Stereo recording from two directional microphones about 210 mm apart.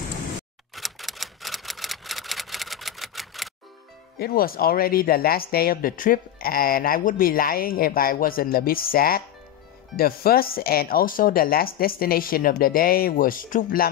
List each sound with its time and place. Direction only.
0.7 s typewriter: centre (ahead or behind)
4.2 s speech: 45° left (ahead or behind)